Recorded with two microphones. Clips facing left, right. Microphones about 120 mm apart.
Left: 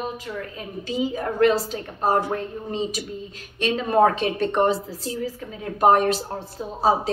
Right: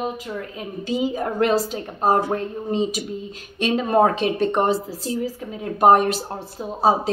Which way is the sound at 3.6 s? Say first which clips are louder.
Right 1 dB; 15° right (ahead or behind).